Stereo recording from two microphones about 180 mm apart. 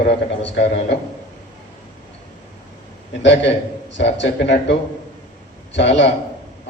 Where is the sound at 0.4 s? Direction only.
70° left (ahead or behind).